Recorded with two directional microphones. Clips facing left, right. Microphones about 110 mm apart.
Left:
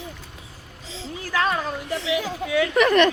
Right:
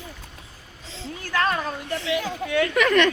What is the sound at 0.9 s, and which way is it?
Speech, centre (ahead or behind).